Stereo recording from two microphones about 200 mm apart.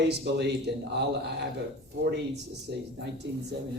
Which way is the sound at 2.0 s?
55° right (ahead or behind).